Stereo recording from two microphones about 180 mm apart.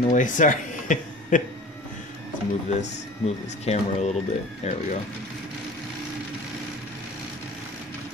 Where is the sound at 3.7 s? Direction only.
35° left (ahead or behind).